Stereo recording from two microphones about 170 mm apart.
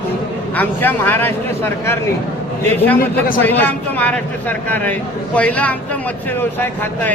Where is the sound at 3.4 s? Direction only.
10° left (ahead or behind).